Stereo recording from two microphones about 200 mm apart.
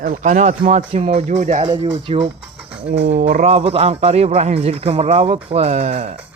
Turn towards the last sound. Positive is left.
turn(degrees=-30)  # may be behind; listen again after turning